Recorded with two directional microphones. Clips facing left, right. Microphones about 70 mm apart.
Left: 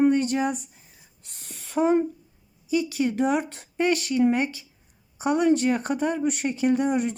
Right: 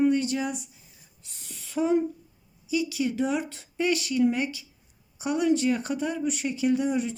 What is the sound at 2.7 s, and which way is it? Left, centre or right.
Speech, left.